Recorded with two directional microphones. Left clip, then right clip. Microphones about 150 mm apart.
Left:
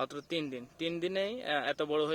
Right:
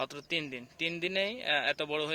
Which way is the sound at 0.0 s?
40° left (ahead or behind).